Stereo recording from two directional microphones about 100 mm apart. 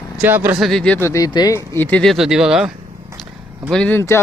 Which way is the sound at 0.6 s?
5° left (ahead or behind).